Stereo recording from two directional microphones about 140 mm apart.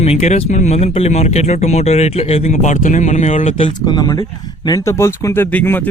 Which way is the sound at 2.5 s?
60° left (ahead or behind).